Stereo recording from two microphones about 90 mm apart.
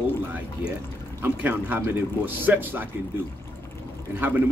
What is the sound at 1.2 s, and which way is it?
Speech, 20° right (ahead or behind).